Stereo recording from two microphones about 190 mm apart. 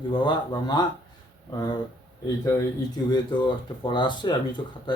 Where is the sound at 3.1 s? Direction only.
25° left (ahead or behind).